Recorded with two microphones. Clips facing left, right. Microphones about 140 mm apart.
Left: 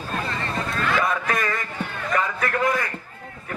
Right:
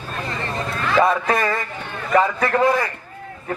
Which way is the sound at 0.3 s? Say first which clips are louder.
Right 1 dB; 25° right (ahead or behind).